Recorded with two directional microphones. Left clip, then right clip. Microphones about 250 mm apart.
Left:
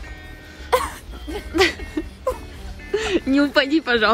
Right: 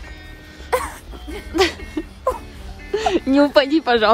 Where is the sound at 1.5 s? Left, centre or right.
Centre.